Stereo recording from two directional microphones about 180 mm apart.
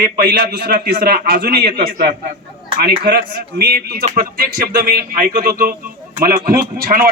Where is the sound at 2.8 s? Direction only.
60° right (ahead or behind).